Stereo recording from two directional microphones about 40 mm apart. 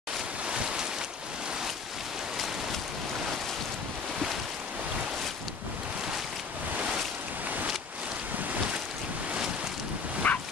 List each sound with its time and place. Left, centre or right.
0.5 s boat: right
10.2 s bow-wow: left